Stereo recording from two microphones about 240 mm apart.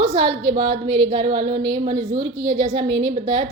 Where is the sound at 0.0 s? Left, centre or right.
Centre.